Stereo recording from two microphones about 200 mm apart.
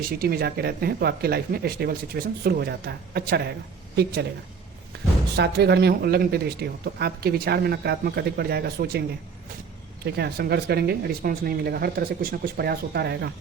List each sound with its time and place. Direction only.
0.1 s speech: 50° right (ahead or behind)
5.4 s speech: 55° right (ahead or behind)